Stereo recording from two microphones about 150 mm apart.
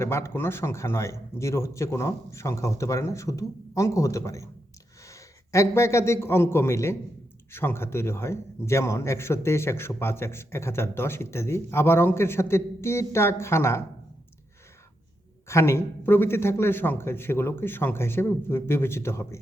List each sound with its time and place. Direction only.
0.0 s a man's voice: 15° left (ahead or behind)
15.4 s a man's voice: 15° left (ahead or behind)